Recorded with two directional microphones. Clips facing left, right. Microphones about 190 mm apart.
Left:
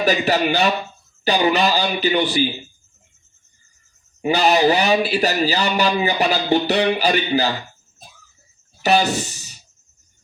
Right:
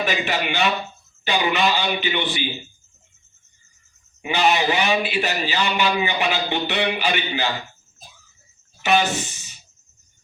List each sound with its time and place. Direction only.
0.0 s a man's voice: 40° left (ahead or behind)
4.2 s a man's voice: 40° left (ahead or behind)
8.8 s speech: 40° left (ahead or behind)